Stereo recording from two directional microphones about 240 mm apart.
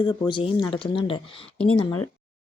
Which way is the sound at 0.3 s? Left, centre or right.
Centre.